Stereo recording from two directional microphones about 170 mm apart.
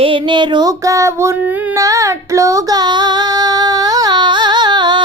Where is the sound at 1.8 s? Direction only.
20° right (ahead or behind).